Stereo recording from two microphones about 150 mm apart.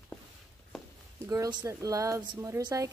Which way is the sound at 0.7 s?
Centre (ahead or behind).